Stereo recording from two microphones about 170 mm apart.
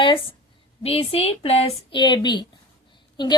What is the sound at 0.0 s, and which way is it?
A woman's voice, 30° left (ahead or behind).